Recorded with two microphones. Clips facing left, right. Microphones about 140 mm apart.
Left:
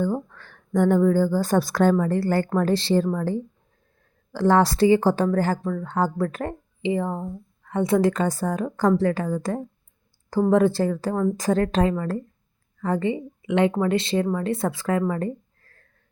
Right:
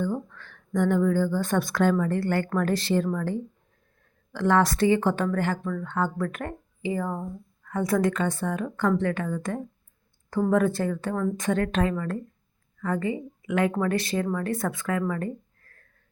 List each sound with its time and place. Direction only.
0.0 s speech: 40° left (ahead or behind); by 8.1 s 25° left (ahead or behind)
8.1 s speech: 40° left (ahead or behind)